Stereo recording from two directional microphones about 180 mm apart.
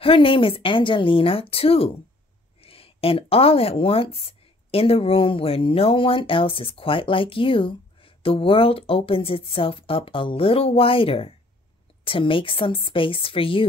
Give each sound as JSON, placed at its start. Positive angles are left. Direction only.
{"t": 0.0, "sound": "speech", "side_deg": 30}